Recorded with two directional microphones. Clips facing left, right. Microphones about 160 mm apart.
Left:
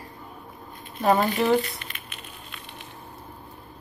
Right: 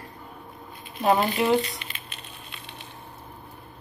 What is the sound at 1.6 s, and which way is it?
Speech, 20° right (ahead or behind).